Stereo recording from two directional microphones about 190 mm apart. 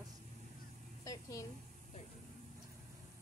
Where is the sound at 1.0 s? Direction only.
15° left (ahead or behind).